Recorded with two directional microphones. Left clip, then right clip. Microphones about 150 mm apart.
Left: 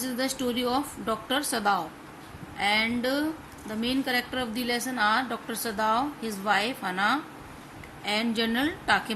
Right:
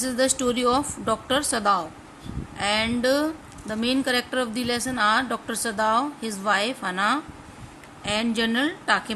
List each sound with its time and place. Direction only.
0.0 s a woman's voice: 45° right (ahead or behind); by 9.1 s 25° right (ahead or behind)